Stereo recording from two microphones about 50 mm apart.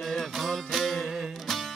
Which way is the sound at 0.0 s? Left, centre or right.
Centre.